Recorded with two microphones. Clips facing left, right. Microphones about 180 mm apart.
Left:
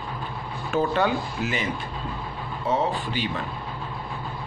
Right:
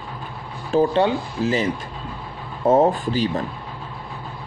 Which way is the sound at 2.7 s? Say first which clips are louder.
Right 9 dB; 45° right (ahead or behind).